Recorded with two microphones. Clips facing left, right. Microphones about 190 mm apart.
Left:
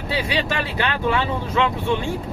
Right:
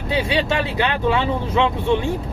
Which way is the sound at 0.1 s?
20° right (ahead or behind).